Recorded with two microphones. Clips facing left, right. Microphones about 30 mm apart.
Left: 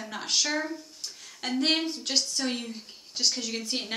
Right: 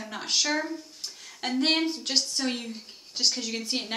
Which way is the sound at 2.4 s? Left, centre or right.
Centre.